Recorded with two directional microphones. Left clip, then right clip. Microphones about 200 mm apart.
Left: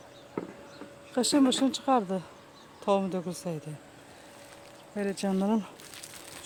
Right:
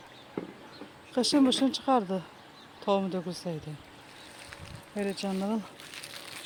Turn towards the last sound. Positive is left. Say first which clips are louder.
# left 3 dB
turn(degrees=30)  # may be behind; listen again after turning